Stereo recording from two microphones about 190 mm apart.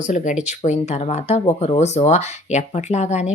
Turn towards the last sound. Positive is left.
turn(degrees=35)  # may be behind; listen again after turning